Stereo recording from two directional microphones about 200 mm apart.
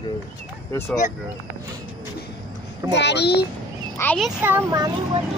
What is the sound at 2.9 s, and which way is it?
Speech, 60° left (ahead or behind).